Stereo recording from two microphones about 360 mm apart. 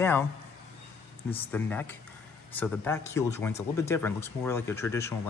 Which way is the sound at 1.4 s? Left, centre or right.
Centre.